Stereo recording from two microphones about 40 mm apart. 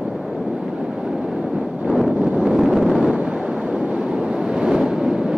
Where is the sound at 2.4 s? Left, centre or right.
Centre.